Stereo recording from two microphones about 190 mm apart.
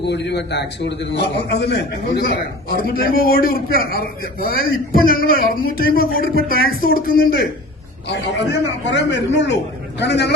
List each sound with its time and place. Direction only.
0.0 s a man's voice: 65° left (ahead or behind)
8.0 s a man's voice: 65° left (ahead or behind)